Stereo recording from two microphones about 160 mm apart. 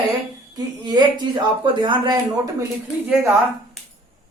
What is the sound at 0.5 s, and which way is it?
Speech, 25° right (ahead or behind).